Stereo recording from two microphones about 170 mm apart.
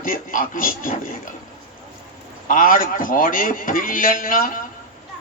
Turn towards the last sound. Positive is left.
turn(degrees=55)  # may be behind; listen again after turning